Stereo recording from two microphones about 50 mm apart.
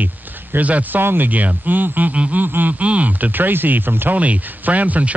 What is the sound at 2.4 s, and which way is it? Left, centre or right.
Speech, right.